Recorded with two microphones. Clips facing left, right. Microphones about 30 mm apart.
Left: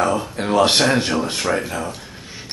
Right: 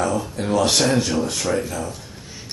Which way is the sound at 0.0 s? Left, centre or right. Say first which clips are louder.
Left 3 dB; left.